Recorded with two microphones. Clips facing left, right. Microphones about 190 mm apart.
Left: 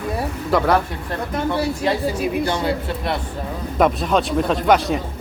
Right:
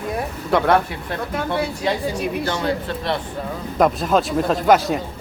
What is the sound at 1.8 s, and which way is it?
Speech, centre (ahead or behind).